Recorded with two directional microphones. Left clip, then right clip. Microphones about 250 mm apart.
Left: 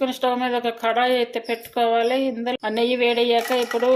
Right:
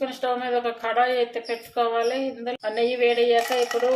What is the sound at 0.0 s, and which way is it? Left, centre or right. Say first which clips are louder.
Speech: left 4 dB; left.